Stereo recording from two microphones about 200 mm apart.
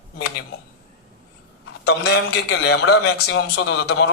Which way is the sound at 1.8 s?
75° left (ahead or behind).